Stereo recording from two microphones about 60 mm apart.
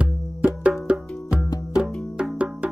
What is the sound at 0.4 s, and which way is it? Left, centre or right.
Wood block, centre.